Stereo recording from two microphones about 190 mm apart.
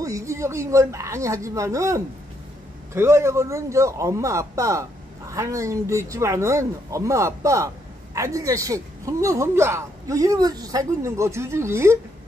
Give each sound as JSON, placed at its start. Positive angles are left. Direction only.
{"t": 0.0, "sound": "speech", "side_deg": -15}